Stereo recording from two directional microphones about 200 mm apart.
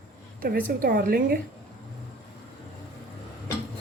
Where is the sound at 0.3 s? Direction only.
45° right (ahead or behind).